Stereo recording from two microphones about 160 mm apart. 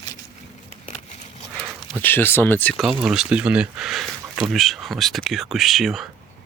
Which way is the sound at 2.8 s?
5° right (ahead or behind).